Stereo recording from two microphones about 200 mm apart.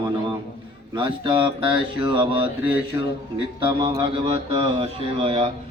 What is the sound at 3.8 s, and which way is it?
A man's voice, 25° right (ahead or behind).